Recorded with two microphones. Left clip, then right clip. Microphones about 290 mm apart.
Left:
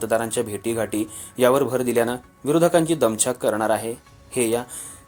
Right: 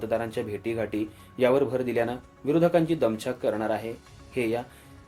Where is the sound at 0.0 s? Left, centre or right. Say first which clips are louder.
Left 6 dB; left.